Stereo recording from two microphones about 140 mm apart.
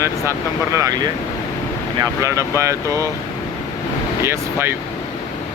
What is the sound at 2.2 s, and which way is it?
Speech, 25° right (ahead or behind).